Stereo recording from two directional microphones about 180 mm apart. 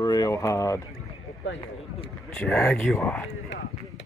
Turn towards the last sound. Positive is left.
turn(degrees=0)  # may be behind; listen again after turning